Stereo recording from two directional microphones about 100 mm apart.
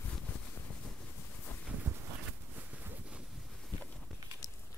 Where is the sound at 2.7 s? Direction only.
15° right (ahead or behind).